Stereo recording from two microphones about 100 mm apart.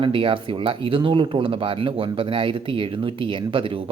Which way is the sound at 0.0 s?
60° right (ahead or behind).